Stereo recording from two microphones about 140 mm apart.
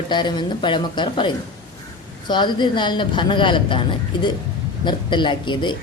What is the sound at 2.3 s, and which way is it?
A woman's voice, 35° left (ahead or behind).